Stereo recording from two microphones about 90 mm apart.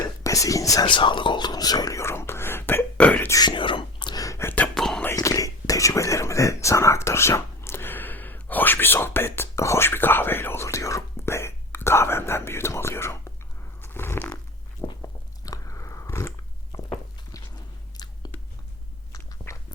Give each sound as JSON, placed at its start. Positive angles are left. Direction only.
{"t": 0.0, "sound": "whispering", "side_deg": 35}
{"t": 0.9, "sound": "speech", "side_deg": 60}
{"t": 3.4, "sound": "whispering", "side_deg": 65}
{"t": 4.2, "sound": "a sound", "side_deg": 35}
{"t": 4.4, "sound": "whispering", "side_deg": 15}
{"t": 4.7, "sound": "music", "side_deg": 5}
{"t": 5.1, "sound": "a sound", "side_deg": 40}
{"t": 14.8, "sound": "biting", "side_deg": 55}
{"t": 15.4, "sound": "biting", "side_deg": 35}
{"t": 16.7, "sound": "walk", "side_deg": 55}
{"t": 17.9, "sound": "chewing", "side_deg": 50}
{"t": 19.5, "sound": "a sound", "side_deg": 30}